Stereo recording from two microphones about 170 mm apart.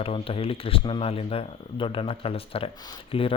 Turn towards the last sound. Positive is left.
turn(degrees=30)  # may be behind; listen again after turning